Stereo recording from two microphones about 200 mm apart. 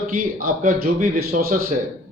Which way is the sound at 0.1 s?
45° right (ahead or behind).